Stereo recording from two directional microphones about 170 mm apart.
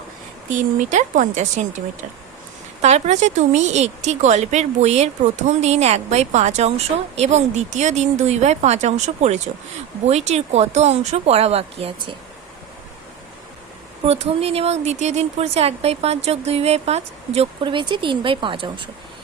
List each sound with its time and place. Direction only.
0.5 s speech: 45° right (ahead or behind)
2.8 s speech: 40° right (ahead or behind)
14.0 s speech: 35° right (ahead or behind)